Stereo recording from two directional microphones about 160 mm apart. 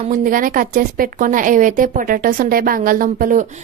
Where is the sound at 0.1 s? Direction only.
55° right (ahead or behind).